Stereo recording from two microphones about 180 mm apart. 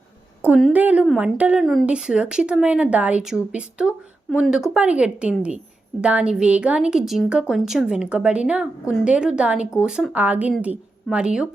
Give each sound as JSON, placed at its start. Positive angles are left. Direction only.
{"t": 0.7, "sound": "a woman's voice", "side_deg": -10}